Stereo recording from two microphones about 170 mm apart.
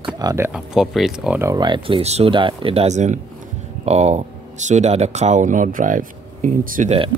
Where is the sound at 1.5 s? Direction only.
25° right (ahead or behind); by 6.9 s 50° right (ahead or behind).